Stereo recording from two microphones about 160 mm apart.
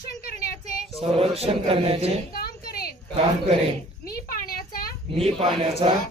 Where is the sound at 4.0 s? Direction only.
70° left (ahead or behind).